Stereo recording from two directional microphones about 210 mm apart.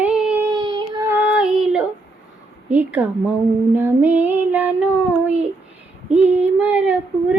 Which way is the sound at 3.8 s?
10° right (ahead or behind).